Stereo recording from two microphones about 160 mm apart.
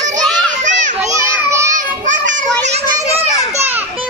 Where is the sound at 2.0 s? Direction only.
50° right (ahead or behind).